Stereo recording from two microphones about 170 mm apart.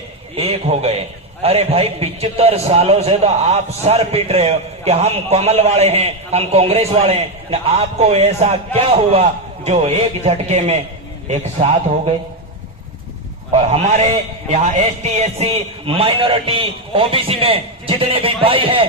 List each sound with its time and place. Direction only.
0.3 s a man's voice: 35° right (ahead or behind)
13.5 s a man's voice: 40° right (ahead or behind)